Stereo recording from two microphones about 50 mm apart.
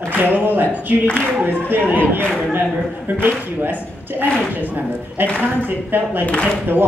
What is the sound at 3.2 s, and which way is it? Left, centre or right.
Speech, right.